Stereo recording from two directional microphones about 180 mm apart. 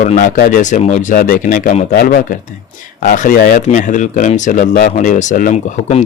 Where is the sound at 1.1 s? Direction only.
50° left (ahead or behind).